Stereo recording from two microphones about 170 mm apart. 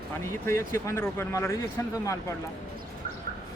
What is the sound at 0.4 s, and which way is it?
Speech, 15° left (ahead or behind).